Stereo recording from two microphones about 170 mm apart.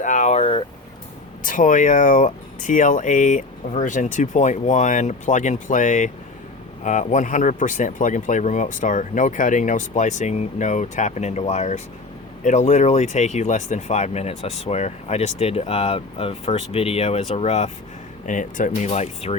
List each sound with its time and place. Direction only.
0.0 s vehicle: 45° left (ahead or behind)
1.5 s speech: 50° left (ahead or behind)
18.3 s speech: 50° left (ahead or behind)